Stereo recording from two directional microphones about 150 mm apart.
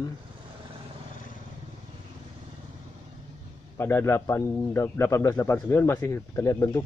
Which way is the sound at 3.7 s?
15° left (ahead or behind).